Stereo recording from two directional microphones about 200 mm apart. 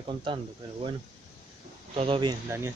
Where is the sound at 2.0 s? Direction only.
25° right (ahead or behind).